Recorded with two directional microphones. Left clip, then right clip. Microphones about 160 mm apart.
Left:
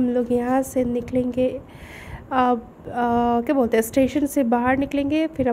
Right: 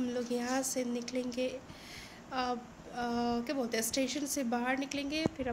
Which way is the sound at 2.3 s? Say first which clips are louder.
Left 16 dB; 60° left (ahead or behind).